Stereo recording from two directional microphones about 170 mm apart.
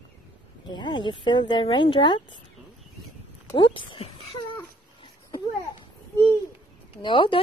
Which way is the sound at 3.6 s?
30° left (ahead or behind).